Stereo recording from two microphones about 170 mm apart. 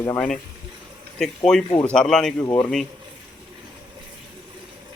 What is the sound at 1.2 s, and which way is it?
A man's voice, 5° left (ahead or behind).